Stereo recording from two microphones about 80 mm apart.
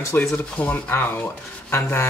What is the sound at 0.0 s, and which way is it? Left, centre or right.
Speech, left.